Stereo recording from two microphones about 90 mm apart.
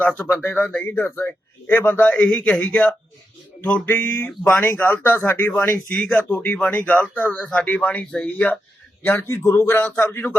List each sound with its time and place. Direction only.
0.0 s speech: 20° left (ahead or behind)
4.3 s speech: 5° left (ahead or behind)
4.6 s speech: 25° left (ahead or behind)
9.0 s speech: 25° left (ahead or behind)